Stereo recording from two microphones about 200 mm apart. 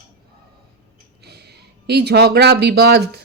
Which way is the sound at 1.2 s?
55° right (ahead or behind).